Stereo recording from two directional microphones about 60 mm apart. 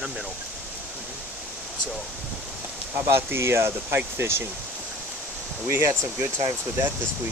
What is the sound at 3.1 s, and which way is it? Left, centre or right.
Speech, right.